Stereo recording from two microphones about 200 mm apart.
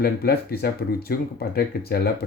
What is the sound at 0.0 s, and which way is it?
Speech, 50° left (ahead or behind).